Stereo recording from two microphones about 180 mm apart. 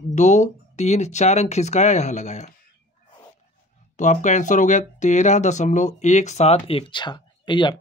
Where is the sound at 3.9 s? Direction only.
40° left (ahead or behind); by 7.7 s 25° left (ahead or behind).